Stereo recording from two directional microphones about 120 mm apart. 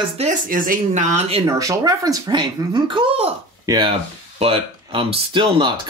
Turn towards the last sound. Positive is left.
turn(degrees=-40)  # may be behind; listen again after turning